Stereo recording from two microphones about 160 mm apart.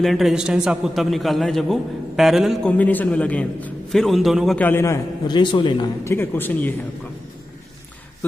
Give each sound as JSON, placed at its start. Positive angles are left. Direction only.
{"t": 0.0, "sound": "a man's voice", "side_deg": 0}
{"t": 2.8, "sound": "a man's voice", "side_deg": 10}
{"t": 4.6, "sound": "a man's voice", "side_deg": 15}
{"t": 6.0, "sound": "a man's voice", "side_deg": 15}